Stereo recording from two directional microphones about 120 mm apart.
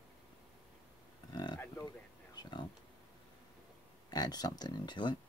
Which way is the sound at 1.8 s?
35° left (ahead or behind).